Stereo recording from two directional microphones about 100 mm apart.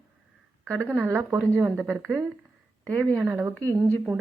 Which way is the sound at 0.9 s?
20° right (ahead or behind).